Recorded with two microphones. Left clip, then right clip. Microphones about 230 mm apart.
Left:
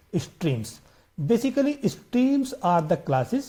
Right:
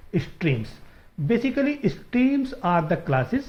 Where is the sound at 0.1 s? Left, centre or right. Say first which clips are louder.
Right 2 dB; left.